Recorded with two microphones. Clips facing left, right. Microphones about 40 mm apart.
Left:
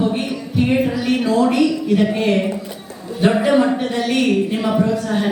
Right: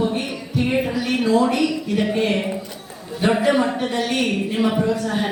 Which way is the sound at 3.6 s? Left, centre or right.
Centre.